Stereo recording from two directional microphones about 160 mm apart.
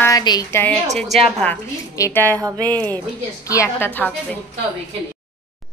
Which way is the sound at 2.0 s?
15° left (ahead or behind).